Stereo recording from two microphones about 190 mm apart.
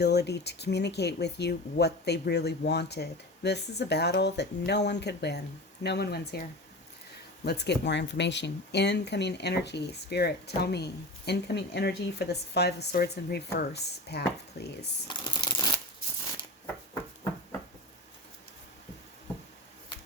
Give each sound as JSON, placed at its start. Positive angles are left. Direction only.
{"t": 0.0, "sound": "speech", "side_deg": 60}
{"t": 7.4, "sound": "speech", "side_deg": 60}
{"t": 15.0, "sound": "shuffling cards", "side_deg": 25}